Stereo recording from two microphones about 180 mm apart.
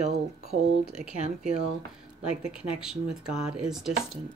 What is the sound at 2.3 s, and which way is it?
Speech, 5° right (ahead or behind).